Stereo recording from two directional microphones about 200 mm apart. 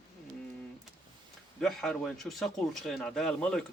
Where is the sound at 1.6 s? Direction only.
Centre (ahead or behind).